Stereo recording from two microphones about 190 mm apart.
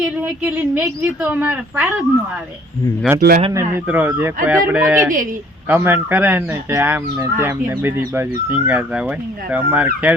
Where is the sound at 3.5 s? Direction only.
10° right (ahead or behind).